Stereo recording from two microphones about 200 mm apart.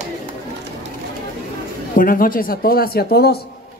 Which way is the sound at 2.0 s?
45° left (ahead or behind).